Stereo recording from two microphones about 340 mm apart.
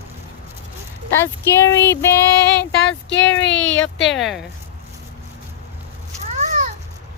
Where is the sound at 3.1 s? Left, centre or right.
Left.